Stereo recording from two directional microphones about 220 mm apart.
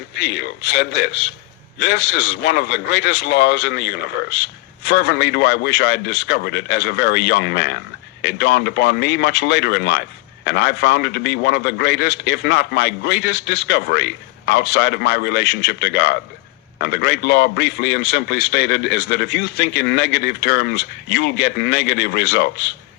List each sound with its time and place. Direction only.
0.2 s speech: 50° left (ahead or behind)